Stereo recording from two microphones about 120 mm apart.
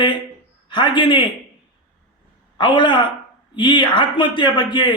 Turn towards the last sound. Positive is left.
turn(degrees=40)  # may be behind; listen again after turning